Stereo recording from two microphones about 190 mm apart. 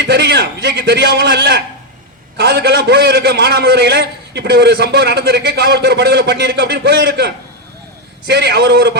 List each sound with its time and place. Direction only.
0.0 s a man's voice: 60° right (ahead or behind)